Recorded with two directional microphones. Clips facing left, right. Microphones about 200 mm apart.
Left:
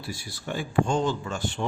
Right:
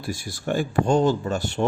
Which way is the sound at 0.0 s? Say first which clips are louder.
Right 6 dB; 45° right (ahead or behind).